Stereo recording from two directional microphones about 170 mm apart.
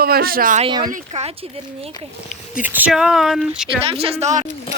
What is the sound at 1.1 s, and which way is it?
Speech, 45° right (ahead or behind).